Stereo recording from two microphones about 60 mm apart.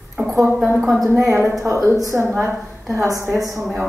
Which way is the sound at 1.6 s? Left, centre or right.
Right.